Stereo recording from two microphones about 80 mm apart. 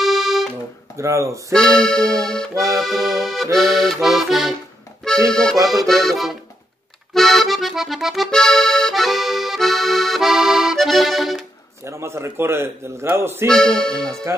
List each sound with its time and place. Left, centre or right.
0.0 s music: centre
0.9 s a man's voice: right
1.5 s accordion: centre
11.8 s a man's voice: right
13.5 s speech: centre